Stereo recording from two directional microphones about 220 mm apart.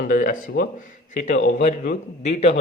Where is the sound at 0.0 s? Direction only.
40° left (ahead or behind).